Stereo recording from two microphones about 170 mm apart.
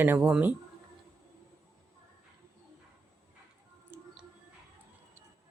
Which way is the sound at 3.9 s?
15° right (ahead or behind).